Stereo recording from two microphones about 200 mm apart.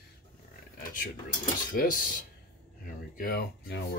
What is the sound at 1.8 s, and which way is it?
Speech, 45° left (ahead or behind).